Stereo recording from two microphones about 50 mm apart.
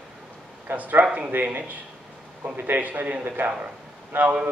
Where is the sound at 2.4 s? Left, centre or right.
Right.